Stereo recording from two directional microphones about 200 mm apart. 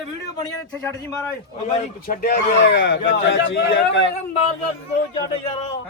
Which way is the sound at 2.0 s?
45° left (ahead or behind).